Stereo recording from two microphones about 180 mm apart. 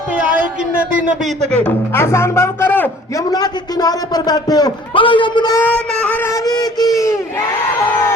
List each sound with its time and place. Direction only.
1.2 s speech: 5° left (ahead or behind)
3.2 s a man's voice: 20° left (ahead or behind)
5.6 s a man's voice: 10° left (ahead or behind)